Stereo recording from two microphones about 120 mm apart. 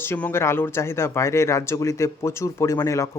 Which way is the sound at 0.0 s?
20° left (ahead or behind).